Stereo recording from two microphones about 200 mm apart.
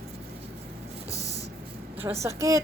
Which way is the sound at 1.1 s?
15° left (ahead or behind).